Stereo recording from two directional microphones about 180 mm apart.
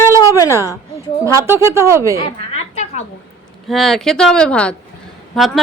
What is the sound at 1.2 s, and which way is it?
Speech, 15° right (ahead or behind).